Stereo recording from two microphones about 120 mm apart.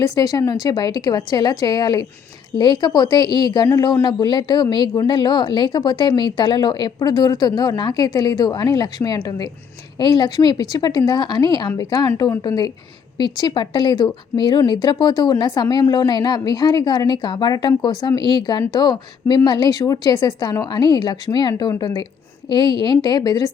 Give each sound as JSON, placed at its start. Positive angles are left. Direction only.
{"t": 0.0, "sound": "speech", "side_deg": 30}